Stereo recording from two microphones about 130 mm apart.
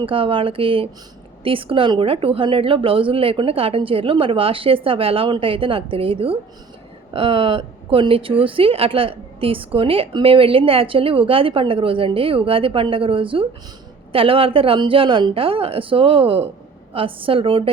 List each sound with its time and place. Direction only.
0.0 s a woman's voice: 45° right (ahead or behind)